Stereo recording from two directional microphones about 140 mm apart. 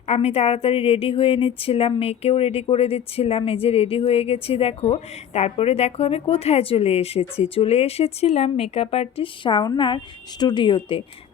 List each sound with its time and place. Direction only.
0.1 s a woman's voice: 50° left (ahead or behind)